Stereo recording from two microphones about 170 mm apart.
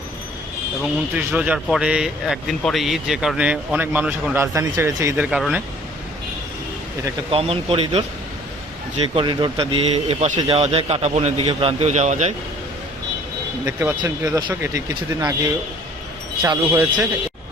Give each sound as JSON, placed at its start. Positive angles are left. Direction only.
{"t": 1.1, "sound": "speech", "side_deg": -10}
{"t": 4.5, "sound": "speech", "side_deg": -20}
{"t": 5.2, "sound": "speech", "side_deg": -5}
{"t": 7.3, "sound": "speech", "side_deg": -35}
{"t": 9.1, "sound": "speech", "side_deg": -30}
{"t": 13.7, "sound": "speech", "side_deg": -20}
{"t": 16.4, "sound": "a man's voice", "side_deg": -15}